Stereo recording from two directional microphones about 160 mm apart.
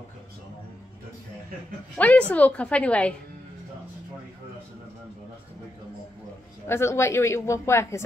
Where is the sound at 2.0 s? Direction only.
10° left (ahead or behind).